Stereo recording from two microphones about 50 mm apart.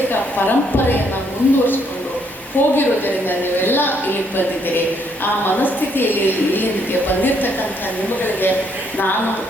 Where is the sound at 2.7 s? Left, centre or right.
Left.